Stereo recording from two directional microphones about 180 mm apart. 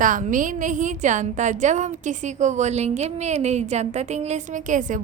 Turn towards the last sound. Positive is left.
turn(degrees=-45)  # may be behind; listen again after turning